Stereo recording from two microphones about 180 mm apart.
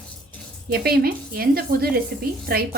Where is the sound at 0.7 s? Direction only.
60° right (ahead or behind).